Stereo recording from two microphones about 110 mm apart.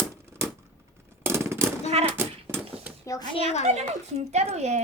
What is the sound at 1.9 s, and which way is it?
Speech, 65° right (ahead or behind).